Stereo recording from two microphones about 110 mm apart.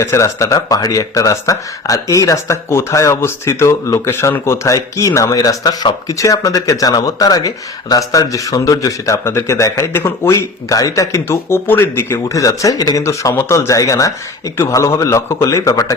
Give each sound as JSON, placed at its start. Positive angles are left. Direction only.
{"t": 0.0, "sound": "speech", "side_deg": 25}